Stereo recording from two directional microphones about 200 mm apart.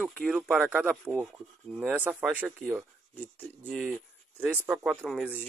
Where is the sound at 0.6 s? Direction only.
10° right (ahead or behind).